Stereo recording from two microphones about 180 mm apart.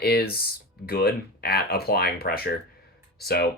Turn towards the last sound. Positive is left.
turn(degrees=60)  # may be behind; listen again after turning